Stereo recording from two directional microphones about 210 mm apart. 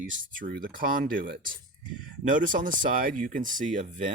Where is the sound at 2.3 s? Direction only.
40° right (ahead or behind).